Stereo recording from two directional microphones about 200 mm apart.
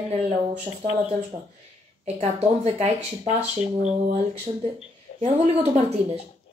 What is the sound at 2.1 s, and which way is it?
Speech, 35° right (ahead or behind).